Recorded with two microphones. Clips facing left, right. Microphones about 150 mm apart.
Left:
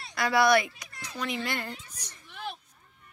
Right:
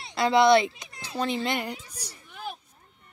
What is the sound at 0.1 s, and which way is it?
A child's voice, 25° right (ahead or behind).